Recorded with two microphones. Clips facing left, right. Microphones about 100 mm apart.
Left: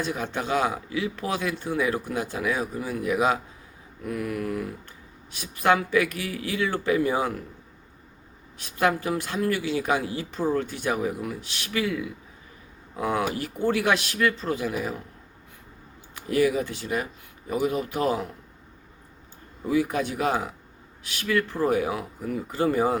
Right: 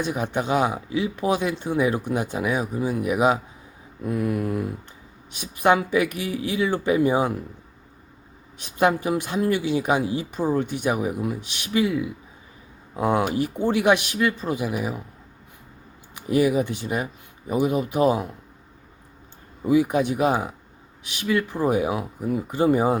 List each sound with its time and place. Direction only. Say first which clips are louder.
0.0 s speech: right 4 dB; 20° right (ahead or behind)
8.5 s speech: right 3 dB; 20° right (ahead or behind)
16.1 s speech: right 3 dB; 20° right (ahead or behind)
19.6 s speech: right 5 dB; 20° right (ahead or behind)